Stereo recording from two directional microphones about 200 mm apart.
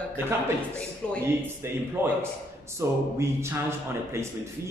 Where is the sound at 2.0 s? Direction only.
10° right (ahead or behind).